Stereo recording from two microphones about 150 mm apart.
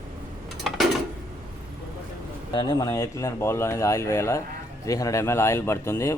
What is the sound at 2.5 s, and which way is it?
Speech, 25° left (ahead or behind).